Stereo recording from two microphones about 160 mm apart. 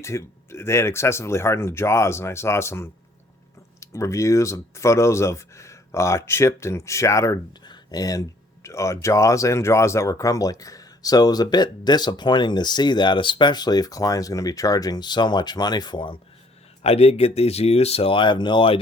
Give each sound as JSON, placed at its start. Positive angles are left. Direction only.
{"t": 0.0, "sound": "speech", "side_deg": 20}
{"t": 16.8, "sound": "speech", "side_deg": 40}